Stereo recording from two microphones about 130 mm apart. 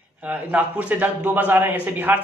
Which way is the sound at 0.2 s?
10° right (ahead or behind).